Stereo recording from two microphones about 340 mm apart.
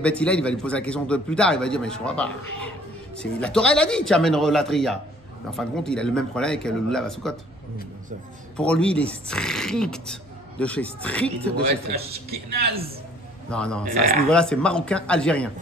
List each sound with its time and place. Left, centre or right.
0.0 s a man's voice: centre
8.5 s a man's voice: centre
11.6 s a man's voice: right
13.5 s a man's voice: centre
13.8 s a man's voice: right
14.3 s a man's voice: centre